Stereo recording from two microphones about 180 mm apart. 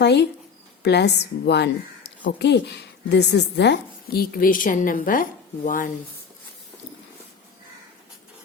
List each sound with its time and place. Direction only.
0.0 s a woman's voice: 70° left (ahead or behind); by 5.9 s 50° left (ahead or behind)